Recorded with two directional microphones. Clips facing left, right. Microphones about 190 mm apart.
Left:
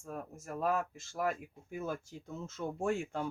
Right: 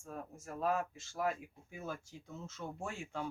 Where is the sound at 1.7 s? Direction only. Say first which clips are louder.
Left 6 dB; 50° left (ahead or behind).